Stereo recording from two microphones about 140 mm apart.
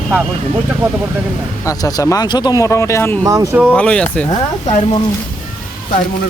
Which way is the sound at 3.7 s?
10° left (ahead or behind).